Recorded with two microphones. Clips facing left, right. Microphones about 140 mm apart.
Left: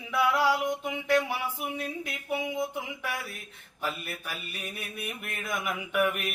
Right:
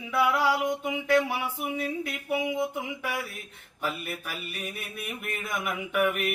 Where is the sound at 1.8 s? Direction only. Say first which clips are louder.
Right 4 dB; 5° right (ahead or behind).